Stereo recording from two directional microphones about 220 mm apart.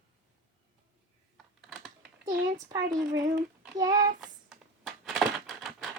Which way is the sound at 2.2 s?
15° right (ahead or behind).